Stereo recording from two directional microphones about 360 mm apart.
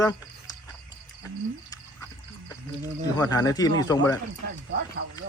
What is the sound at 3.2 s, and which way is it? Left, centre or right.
Speech, centre.